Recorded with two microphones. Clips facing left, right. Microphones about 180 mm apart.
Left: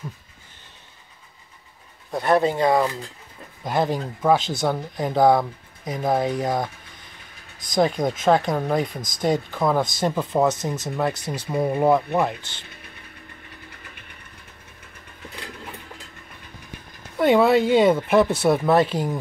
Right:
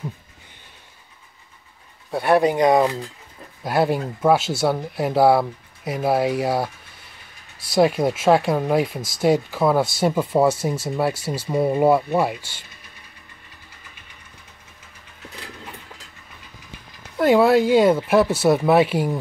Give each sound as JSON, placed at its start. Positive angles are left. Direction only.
{"t": 2.0, "sound": "speech", "side_deg": -10}
{"t": 3.6, "sound": "speech", "side_deg": -10}
{"t": 12.6, "sound": "a sound", "side_deg": 55}
{"t": 13.7, "sound": "vehicle", "side_deg": 55}
{"t": 17.2, "sound": "speech", "side_deg": 0}